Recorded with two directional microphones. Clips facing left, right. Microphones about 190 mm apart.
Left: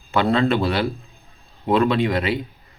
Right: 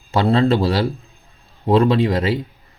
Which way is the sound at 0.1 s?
35° right (ahead or behind).